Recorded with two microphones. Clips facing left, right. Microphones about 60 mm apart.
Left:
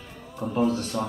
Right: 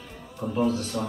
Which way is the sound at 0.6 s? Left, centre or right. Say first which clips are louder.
Left 1 dB; left.